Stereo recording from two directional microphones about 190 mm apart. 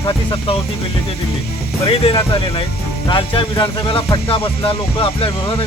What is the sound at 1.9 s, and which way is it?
Speech, 30° left (ahead or behind).